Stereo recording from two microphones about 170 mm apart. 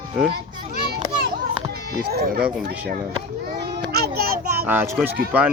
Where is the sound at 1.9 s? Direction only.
65° right (ahead or behind).